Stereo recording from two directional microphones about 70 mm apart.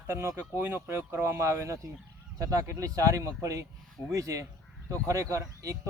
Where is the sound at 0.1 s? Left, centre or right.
Right.